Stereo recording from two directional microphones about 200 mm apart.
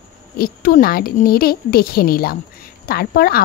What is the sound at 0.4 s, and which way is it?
A woman's voice, 45° left (ahead or behind).